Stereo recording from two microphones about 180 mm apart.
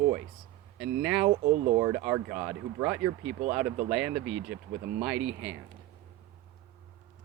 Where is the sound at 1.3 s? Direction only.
35° right (ahead or behind).